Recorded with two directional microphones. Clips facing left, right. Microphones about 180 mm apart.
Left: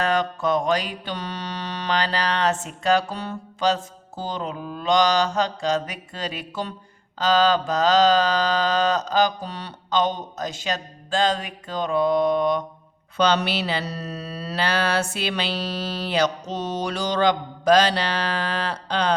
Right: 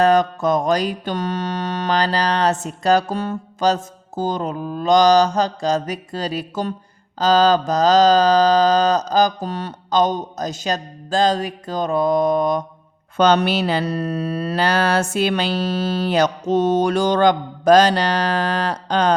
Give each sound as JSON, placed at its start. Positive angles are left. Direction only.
{"t": 0.0, "sound": "mantra", "side_deg": -40}